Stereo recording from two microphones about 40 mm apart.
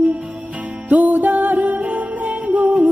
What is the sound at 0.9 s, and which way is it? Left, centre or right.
Music, right.